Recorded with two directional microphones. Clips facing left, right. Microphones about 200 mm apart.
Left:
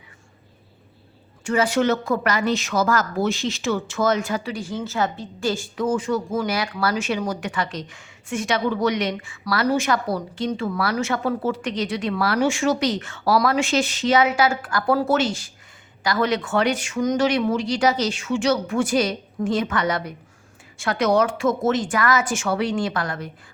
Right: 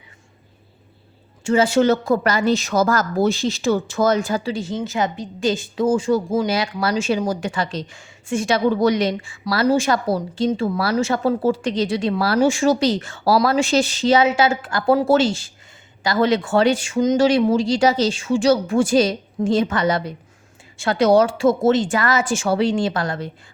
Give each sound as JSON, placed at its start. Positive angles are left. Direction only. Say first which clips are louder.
{"t": 1.5, "sound": "speech", "louder": "right 4 dB", "side_deg": -25}